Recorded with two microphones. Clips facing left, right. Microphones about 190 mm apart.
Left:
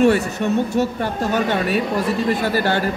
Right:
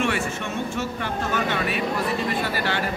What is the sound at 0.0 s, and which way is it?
Speech, 40° left (ahead or behind).